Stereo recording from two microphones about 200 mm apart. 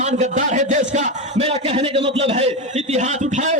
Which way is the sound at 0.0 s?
35° right (ahead or behind).